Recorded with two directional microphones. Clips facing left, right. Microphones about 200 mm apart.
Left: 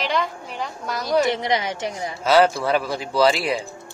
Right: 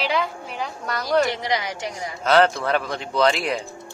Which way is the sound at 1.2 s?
20° left (ahead or behind).